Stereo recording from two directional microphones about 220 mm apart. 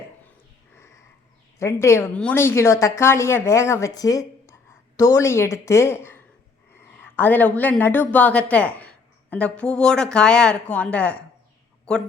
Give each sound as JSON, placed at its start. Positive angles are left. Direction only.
{"t": 1.5, "sound": "a woman's voice", "side_deg": 10}